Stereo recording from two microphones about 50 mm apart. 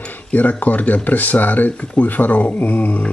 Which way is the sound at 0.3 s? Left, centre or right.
Left.